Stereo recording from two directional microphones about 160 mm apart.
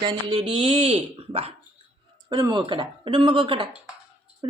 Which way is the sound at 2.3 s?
30° right (ahead or behind).